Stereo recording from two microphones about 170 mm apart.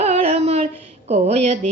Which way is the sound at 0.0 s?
40° right (ahead or behind).